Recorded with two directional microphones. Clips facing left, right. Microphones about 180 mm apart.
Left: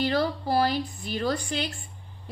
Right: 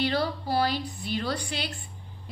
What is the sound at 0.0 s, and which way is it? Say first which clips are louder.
A woman's voice: left 2 dB; 50° left (ahead or behind).